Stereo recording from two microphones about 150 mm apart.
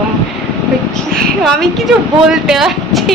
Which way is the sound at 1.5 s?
5° left (ahead or behind).